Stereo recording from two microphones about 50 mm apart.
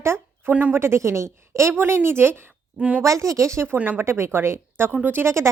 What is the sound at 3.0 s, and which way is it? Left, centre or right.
Speech, right.